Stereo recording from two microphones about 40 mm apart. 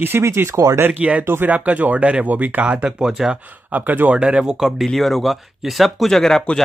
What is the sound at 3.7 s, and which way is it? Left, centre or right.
Speech, right.